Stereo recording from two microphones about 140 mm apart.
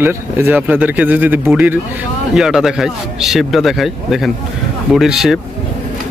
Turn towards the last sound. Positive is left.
turn(degrees=0)  # may be behind; listen again after turning